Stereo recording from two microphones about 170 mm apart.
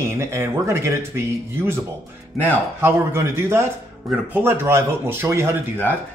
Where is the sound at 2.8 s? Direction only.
15° right (ahead or behind).